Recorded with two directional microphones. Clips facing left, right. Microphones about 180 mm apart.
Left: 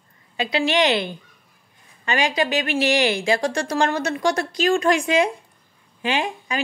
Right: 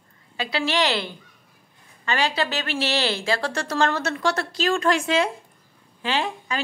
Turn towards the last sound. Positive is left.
turn(degrees=15)  # may be behind; listen again after turning